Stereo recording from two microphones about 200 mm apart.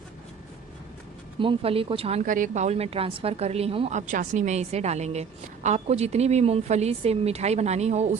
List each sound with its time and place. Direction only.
1.4 s a woman's voice: 25° right (ahead or behind)